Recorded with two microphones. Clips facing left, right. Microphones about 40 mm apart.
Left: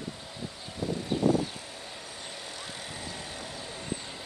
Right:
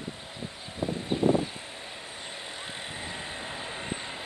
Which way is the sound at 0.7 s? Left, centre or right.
Right.